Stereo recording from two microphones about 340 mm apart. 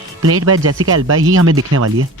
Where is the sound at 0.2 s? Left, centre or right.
Right.